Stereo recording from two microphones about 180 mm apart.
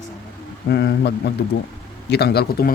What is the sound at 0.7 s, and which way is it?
Speech, 65° left (ahead or behind).